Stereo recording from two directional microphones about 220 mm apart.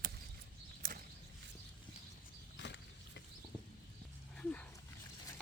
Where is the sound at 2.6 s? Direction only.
55° left (ahead or behind).